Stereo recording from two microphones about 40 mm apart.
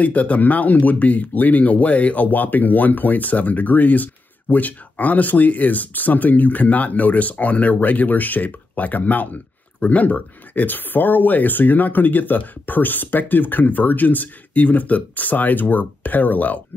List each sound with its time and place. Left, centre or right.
0.0 s speech: left